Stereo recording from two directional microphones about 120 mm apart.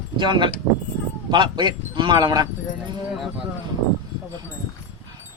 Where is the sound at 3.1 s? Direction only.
Centre (ahead or behind).